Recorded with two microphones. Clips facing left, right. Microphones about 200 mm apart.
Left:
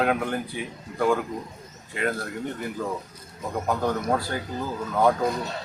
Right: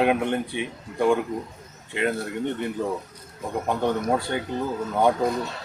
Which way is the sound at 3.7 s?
25° right (ahead or behind).